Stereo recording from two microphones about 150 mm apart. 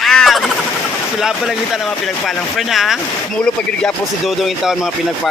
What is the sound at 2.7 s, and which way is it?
Speech, centre (ahead or behind).